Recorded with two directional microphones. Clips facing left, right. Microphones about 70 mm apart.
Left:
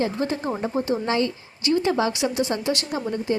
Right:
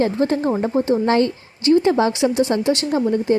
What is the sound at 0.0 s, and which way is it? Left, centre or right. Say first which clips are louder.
Speech: right 6 dB; right.